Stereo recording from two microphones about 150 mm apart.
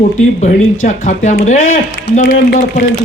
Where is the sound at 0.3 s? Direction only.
55° left (ahead or behind).